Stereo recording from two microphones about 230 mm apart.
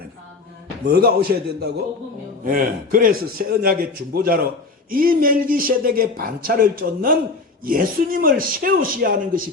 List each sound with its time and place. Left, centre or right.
0.9 s speech: right